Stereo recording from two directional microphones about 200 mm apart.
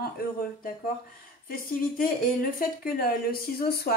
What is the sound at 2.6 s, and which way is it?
Speech, 45° left (ahead or behind).